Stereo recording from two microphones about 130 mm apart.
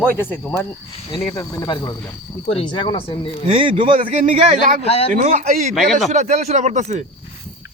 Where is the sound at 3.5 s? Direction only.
40° right (ahead or behind).